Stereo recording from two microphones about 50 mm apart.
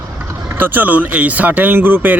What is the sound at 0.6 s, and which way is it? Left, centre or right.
Speech, right.